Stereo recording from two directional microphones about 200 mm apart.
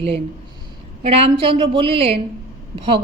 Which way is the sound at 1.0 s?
30° right (ahead or behind).